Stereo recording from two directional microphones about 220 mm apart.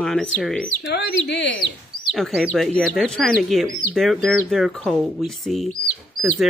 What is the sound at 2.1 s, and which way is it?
Speech, centre (ahead or behind).